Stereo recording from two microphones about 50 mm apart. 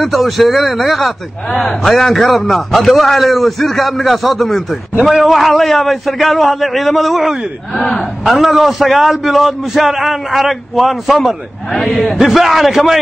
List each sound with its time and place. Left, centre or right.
0.0 s a man's voice: centre
7.7 s a man's voice: centre
8.3 s a man's voice: centre